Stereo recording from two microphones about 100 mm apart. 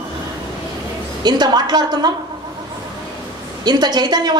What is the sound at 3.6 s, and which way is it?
Speech, 45° right (ahead or behind).